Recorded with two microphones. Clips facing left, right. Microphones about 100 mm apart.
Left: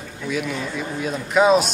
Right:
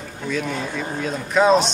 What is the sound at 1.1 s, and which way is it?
Speech, 5° left (ahead or behind).